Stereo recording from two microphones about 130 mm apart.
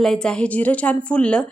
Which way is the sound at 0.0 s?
5° left (ahead or behind).